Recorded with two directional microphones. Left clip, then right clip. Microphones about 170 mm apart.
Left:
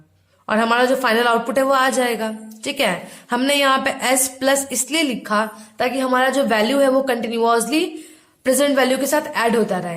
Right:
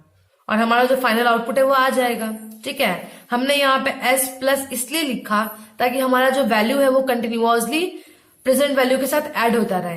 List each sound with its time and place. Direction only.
0.4 s a woman's voice: 35° left (ahead or behind)